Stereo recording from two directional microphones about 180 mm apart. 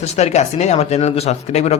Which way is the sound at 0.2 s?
40° left (ahead or behind).